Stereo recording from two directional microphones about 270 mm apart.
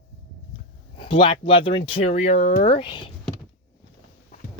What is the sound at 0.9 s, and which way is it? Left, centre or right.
Speech, centre.